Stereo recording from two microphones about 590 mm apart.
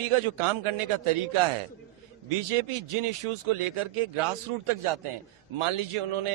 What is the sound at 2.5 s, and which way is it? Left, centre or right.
Speech, right.